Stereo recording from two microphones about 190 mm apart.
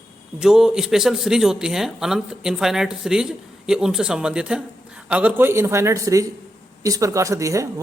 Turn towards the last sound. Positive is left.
turn(degrees=-15)  # may be behind; listen again after turning